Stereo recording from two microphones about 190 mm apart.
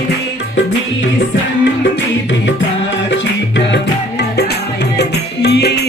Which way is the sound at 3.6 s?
65° left (ahead or behind).